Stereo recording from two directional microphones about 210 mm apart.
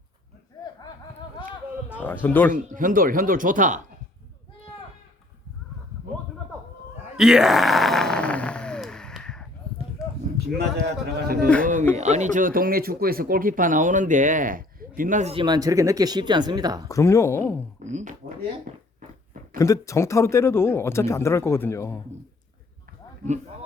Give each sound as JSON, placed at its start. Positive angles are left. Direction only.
{"t": 2.0, "sound": "speech", "side_deg": 10}
{"t": 2.5, "sound": "speech", "side_deg": -40}
{"t": 7.2, "sound": "groan", "side_deg": -5}
{"t": 10.0, "sound": "a sound", "side_deg": -5}
{"t": 10.3, "sound": "speech", "side_deg": -50}
{"t": 11.6, "sound": "speech", "side_deg": -40}
{"t": 16.9, "sound": "speech", "side_deg": 15}
{"t": 17.8, "sound": "speech", "side_deg": -35}
{"t": 18.7, "sound": "a sound", "side_deg": -30}
{"t": 19.5, "sound": "speech", "side_deg": 15}